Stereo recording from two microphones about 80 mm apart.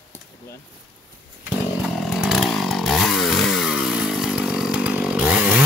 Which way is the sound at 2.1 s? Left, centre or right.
Centre.